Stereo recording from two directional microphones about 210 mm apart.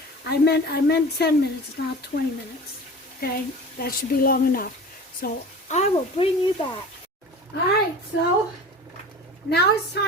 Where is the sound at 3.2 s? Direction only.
45° left (ahead or behind).